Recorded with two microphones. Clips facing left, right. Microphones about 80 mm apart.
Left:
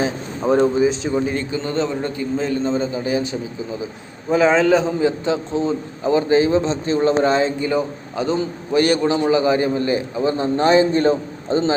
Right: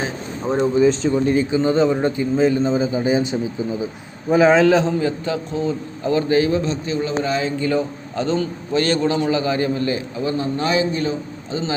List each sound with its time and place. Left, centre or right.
0.4 s a man's voice: left
1.5 s a man's voice: centre
3.0 s a man's voice: right
4.3 s a man's voice: centre
4.9 s a man's voice: left
7.6 s a man's voice: centre; by 11.7 s left